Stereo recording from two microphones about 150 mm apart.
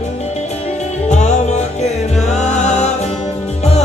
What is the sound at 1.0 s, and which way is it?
Music, 50° left (ahead or behind).